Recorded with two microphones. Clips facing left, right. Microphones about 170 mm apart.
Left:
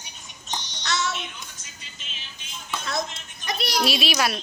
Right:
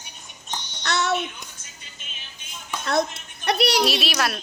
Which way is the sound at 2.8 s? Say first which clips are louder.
Right 8 dB; 60° right (ahead or behind).